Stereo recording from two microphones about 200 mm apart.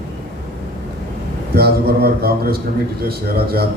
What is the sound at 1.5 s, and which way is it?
Speech, 50° right (ahead or behind).